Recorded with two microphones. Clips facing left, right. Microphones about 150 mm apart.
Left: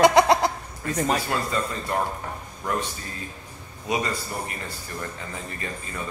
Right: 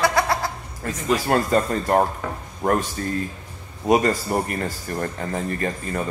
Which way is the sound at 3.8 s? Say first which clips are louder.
Right 9 dB; 50° right (ahead or behind).